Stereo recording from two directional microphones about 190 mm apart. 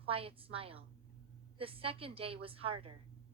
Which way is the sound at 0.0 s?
30° right (ahead or behind).